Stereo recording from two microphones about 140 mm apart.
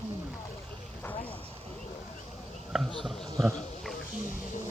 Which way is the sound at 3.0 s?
Centre (ahead or behind).